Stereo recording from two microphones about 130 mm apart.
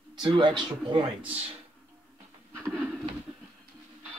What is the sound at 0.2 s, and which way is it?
Speech, 40° right (ahead or behind).